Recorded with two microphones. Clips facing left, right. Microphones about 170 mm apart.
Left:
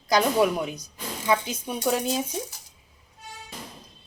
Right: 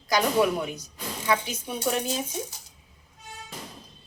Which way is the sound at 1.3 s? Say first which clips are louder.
Left 2 dB; 20° left (ahead or behind).